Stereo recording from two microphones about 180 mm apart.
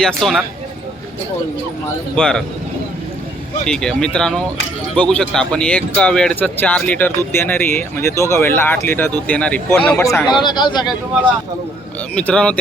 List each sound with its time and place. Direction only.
0.0 s speech: centre (ahead or behind)
2.1 s speech: 5° left (ahead or behind)
3.7 s speech: 5° left (ahead or behind)
10.4 s speech: 25° left (ahead or behind)
12.1 s speech: 5° left (ahead or behind)